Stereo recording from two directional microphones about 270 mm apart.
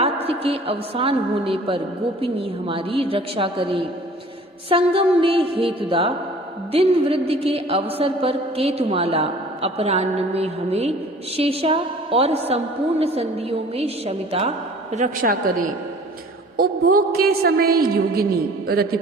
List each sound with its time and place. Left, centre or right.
0.0 s a woman's voice: right
2.2 s a sound: centre
16.6 s a woman's voice: right